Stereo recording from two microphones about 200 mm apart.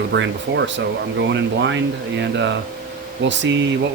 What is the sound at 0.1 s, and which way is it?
Speech, 65° right (ahead or behind).